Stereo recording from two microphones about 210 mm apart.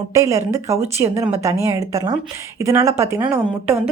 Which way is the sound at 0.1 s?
15° right (ahead or behind).